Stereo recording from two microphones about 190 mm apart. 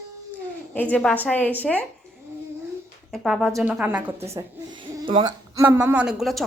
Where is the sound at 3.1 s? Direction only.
Centre (ahead or behind); by 5.6 s 20° right (ahead or behind).